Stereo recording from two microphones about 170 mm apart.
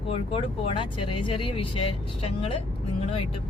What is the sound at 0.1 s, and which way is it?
Speech, 35° left (ahead or behind).